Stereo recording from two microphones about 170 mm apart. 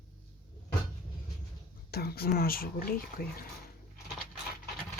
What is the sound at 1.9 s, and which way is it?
Speech, 65° left (ahead or behind).